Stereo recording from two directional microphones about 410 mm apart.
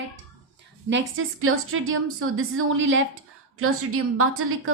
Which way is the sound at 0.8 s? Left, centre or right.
Right.